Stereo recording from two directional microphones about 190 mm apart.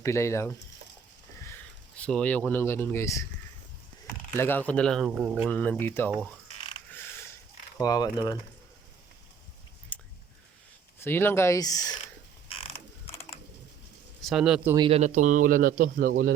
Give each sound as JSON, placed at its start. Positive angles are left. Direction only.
{"t": 0.0, "sound": "speech", "side_deg": 15}
{"t": 2.0, "sound": "speech", "side_deg": 5}
{"t": 4.4, "sound": "speech", "side_deg": 10}
{"t": 5.5, "sound": "speech", "side_deg": 10}
{"t": 6.9, "sound": "a sound", "side_deg": 10}
{"t": 7.8, "sound": "speech", "side_deg": 20}
{"t": 9.9, "sound": "a sound", "side_deg": 5}
{"t": 11.0, "sound": "speech", "side_deg": 10}
{"t": 12.5, "sound": "a sound", "side_deg": 30}
{"t": 14.2, "sound": "speech", "side_deg": 0}
{"t": 14.8, "sound": "speech", "side_deg": -30}